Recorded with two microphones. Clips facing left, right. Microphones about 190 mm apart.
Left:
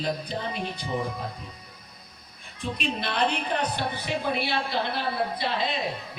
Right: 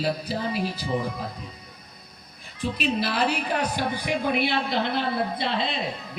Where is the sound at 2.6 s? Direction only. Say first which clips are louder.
Right 4 dB; 5° right (ahead or behind); by 5.6 s 25° right (ahead or behind).